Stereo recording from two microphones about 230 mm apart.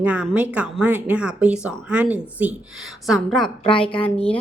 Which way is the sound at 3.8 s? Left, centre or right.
Left.